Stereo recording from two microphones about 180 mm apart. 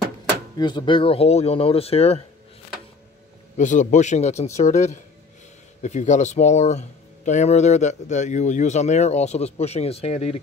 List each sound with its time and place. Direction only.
0.6 s speech: 25° left (ahead or behind)
3.5 s speech: 45° left (ahead or behind)